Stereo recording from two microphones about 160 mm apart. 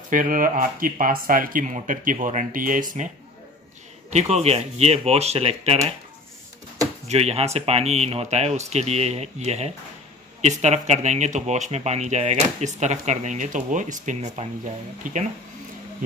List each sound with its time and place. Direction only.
0.1 s speech: 60° right (ahead or behind)
4.1 s speech: 45° right (ahead or behind)
7.1 s speech: 40° right (ahead or behind)